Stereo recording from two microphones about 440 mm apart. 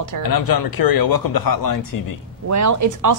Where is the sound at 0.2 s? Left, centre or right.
Left.